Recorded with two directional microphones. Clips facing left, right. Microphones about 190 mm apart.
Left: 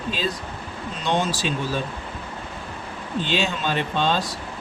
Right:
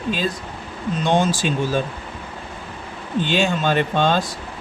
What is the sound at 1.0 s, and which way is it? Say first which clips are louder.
Speech: right 4 dB; 50° right (ahead or behind).